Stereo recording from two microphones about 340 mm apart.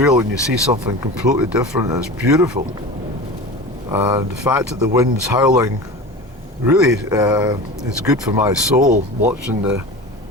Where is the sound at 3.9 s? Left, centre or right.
Centre.